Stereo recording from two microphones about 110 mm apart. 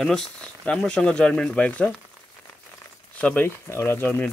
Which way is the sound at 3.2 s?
15° left (ahead or behind).